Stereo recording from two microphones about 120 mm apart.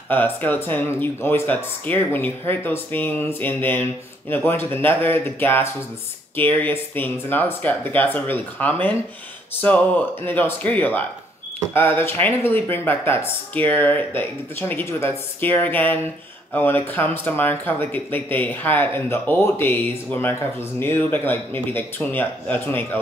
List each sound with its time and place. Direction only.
0.1 s speech: 15° left (ahead or behind)